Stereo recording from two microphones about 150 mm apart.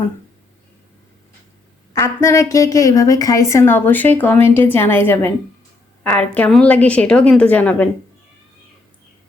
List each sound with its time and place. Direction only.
1.9 s a woman's voice: 20° left (ahead or behind)